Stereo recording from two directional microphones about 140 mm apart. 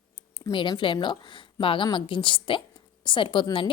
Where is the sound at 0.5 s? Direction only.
35° left (ahead or behind).